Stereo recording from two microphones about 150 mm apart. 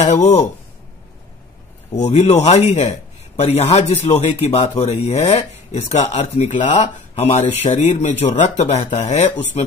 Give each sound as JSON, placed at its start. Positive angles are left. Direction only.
{"t": 0.0, "sound": "speech", "side_deg": 45}
{"t": 2.0, "sound": "speech", "side_deg": 45}